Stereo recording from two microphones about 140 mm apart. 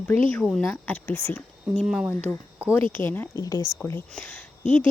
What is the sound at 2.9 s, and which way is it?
Speech, 15° left (ahead or behind).